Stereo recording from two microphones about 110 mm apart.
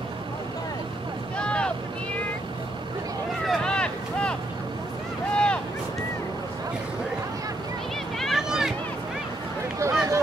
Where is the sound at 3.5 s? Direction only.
5° left (ahead or behind).